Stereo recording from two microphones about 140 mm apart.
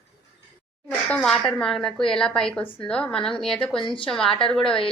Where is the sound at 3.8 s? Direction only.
35° left (ahead or behind).